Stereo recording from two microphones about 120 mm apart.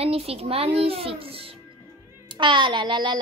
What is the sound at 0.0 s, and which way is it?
A child's voice, 55° right (ahead or behind).